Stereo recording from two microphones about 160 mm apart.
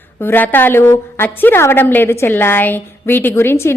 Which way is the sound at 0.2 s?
10° left (ahead or behind).